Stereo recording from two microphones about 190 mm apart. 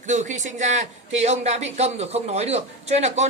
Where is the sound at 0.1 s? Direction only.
40° right (ahead or behind).